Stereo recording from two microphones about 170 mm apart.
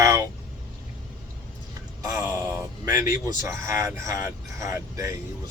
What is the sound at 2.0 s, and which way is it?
Speech, 15° right (ahead or behind).